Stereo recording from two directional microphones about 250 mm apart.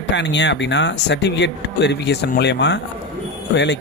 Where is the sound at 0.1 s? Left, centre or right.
Left.